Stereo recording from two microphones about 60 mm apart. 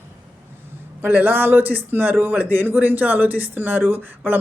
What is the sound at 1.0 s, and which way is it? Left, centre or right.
A man's voice, right.